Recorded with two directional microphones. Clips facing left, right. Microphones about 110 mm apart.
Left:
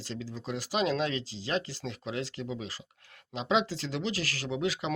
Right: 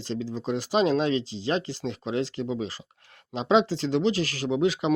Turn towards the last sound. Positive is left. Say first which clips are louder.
# right 7 dB
turn(degrees=-25)  # may be behind; listen again after turning